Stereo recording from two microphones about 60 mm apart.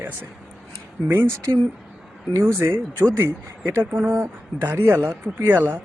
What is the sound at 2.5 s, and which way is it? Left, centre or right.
Speech, right.